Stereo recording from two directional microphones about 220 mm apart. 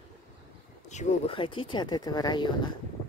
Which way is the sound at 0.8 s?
30° left (ahead or behind).